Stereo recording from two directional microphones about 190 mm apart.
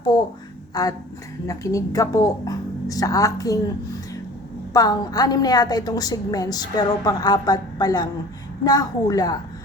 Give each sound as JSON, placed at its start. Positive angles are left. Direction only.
{"t": 0.7, "sound": "a sound", "side_deg": 20}
{"t": 1.5, "sound": "a woman's voice", "side_deg": 15}
{"t": 4.7, "sound": "a woman's voice", "side_deg": 20}